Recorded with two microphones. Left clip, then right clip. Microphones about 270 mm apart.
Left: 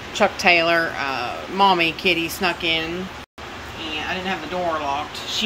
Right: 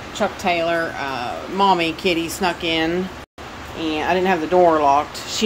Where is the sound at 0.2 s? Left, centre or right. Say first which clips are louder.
Left 4 dB; centre.